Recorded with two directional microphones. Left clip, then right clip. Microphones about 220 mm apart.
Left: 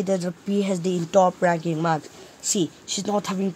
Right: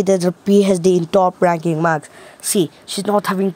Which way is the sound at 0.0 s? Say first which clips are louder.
Right 9 dB; 45° right (ahead or behind).